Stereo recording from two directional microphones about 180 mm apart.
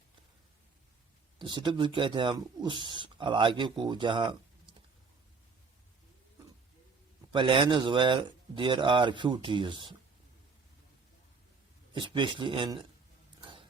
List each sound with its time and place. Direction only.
1.4 s speech: 25° right (ahead or behind)
7.3 s speech: 30° right (ahead or behind)
11.9 s speech: 25° right (ahead or behind)